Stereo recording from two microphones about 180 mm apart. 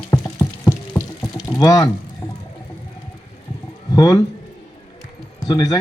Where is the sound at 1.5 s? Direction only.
20° left (ahead or behind).